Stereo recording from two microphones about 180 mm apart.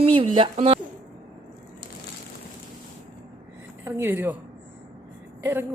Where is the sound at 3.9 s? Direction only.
15° right (ahead or behind).